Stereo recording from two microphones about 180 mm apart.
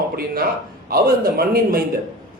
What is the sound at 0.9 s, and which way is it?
Speech, 55° right (ahead or behind).